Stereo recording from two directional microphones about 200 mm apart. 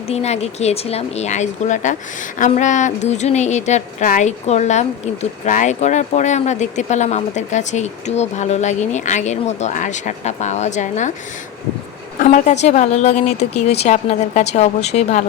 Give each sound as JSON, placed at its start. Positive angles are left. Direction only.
{"t": 0.1, "sound": "a woman's voice", "side_deg": 30}
{"t": 12.2, "sound": "a woman's voice", "side_deg": 35}